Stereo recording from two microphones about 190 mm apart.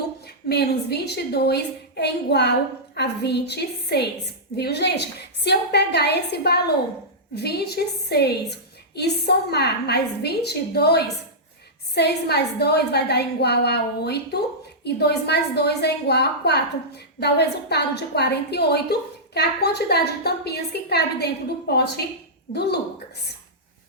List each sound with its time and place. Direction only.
0.4 s a woman's voice: 60° left (ahead or behind)